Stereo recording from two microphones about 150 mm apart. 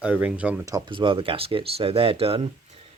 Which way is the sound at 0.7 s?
30° right (ahead or behind).